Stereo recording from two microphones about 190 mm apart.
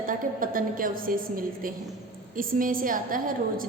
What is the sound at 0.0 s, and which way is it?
A woman's voice, 45° right (ahead or behind).